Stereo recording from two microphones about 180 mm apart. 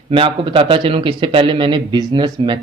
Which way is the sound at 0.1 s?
30° right (ahead or behind).